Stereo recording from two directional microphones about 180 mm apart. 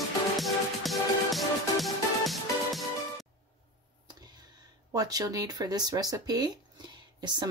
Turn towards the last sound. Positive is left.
turn(degrees=-25)  # may be behind; listen again after turning